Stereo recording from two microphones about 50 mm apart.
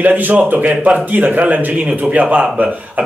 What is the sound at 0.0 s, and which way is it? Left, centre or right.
Speech, right.